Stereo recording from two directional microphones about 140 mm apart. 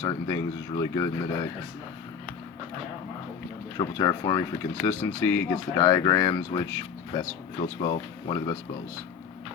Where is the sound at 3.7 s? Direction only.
30° left (ahead or behind).